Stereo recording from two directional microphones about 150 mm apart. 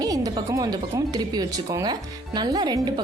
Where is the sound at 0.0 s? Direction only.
25° right (ahead or behind).